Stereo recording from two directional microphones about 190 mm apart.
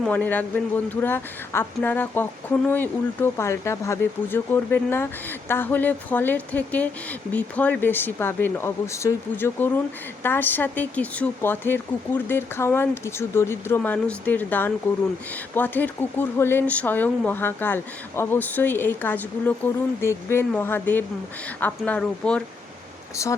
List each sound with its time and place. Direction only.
0.0 s speech: 10° left (ahead or behind)